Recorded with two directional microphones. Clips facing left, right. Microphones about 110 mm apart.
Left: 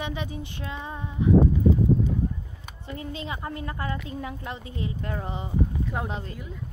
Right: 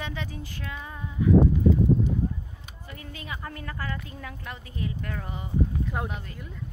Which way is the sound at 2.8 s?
25° left (ahead or behind).